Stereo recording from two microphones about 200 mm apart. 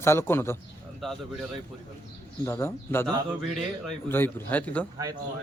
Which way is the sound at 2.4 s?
15° left (ahead or behind).